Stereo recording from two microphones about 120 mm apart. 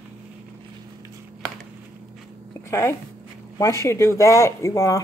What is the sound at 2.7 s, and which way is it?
Speech, 25° left (ahead or behind).